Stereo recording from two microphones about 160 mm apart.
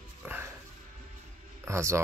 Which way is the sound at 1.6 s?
20° right (ahead or behind).